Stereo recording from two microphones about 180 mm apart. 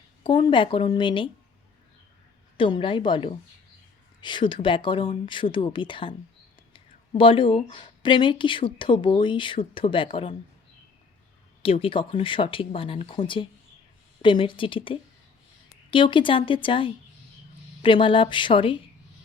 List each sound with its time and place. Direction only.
0.2 s speech: 25° left (ahead or behind)
2.6 s speech: 30° left (ahead or behind)
11.6 s speech: 30° left (ahead or behind)